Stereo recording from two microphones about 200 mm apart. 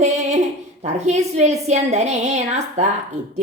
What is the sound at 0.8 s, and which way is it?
A woman's voice, 35° right (ahead or behind).